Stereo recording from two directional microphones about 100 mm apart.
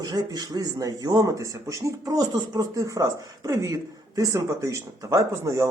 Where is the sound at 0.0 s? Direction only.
40° right (ahead or behind).